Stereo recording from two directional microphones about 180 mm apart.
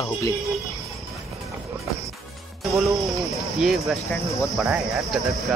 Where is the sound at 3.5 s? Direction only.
Centre (ahead or behind).